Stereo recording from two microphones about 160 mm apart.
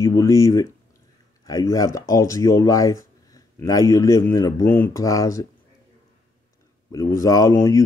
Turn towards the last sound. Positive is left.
turn(degrees=20)  # may be behind; listen again after turning